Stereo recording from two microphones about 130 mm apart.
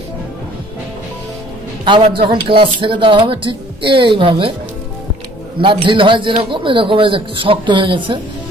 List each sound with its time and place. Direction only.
1.9 s a man's voice: 45° right (ahead or behind)
5.6 s a man's voice: 40° right (ahead or behind)